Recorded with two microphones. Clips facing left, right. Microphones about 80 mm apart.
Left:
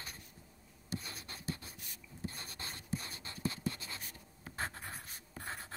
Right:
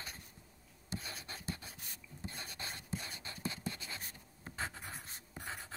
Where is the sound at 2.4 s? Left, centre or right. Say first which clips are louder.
Right 1 dB; left.